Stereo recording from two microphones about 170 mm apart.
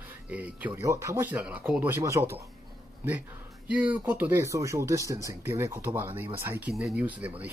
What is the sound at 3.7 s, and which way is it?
Speech, 10° right (ahead or behind).